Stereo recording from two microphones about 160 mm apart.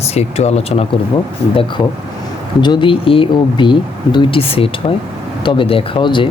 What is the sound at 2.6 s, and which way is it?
Speech, 30° left (ahead or behind).